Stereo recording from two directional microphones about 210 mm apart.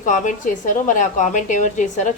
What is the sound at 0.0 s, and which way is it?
A woman's voice, 35° left (ahead or behind).